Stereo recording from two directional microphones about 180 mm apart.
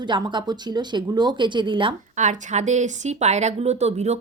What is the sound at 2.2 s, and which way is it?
Speech, 40° right (ahead or behind).